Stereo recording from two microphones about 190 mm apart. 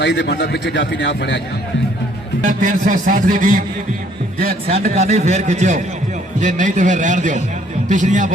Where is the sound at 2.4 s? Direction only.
40° right (ahead or behind).